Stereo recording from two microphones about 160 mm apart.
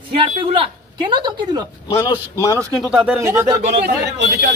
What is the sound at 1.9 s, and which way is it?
Speech, 20° left (ahead or behind).